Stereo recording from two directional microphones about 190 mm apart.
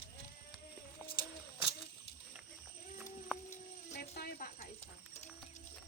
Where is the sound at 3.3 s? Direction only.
5° right (ahead or behind).